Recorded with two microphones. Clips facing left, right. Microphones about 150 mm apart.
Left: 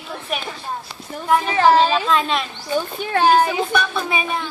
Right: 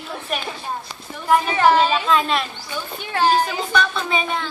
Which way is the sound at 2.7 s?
50° left (ahead or behind).